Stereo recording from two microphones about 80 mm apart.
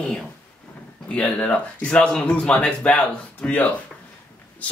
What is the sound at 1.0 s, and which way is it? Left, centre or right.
Speech, centre.